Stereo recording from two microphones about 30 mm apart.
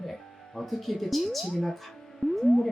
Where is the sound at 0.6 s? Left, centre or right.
Centre.